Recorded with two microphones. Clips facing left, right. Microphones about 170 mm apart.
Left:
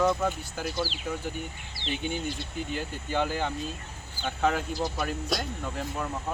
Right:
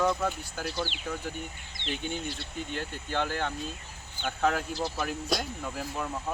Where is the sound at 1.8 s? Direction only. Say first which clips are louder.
Left 1 dB; 35° left (ahead or behind).